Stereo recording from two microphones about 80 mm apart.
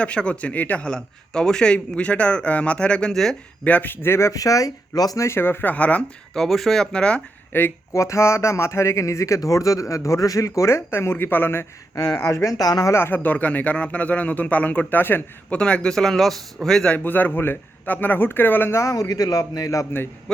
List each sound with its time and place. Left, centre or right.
0.0 s a man's voice: centre
3.6 s speech: centre; by 5.2 s left
5.2 s a man's voice: left
5.7 s a man's voice: centre
6.3 s speech: centre
7.5 s a man's voice: left
7.9 s speech: left
11.9 s speech: left
12.2 s a man's voice: left
12.9 s a man's voice: left
15.5 s a man's voice: centre
17.0 s a man's voice: left
18.8 s a man's voice: left